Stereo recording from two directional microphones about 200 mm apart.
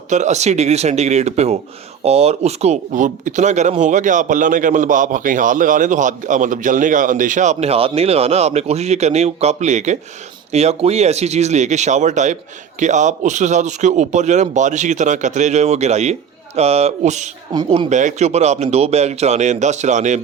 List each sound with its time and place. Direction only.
0.1 s speech: 35° right (ahead or behind)